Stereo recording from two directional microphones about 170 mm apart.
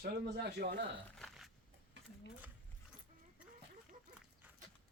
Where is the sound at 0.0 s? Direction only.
65° right (ahead or behind).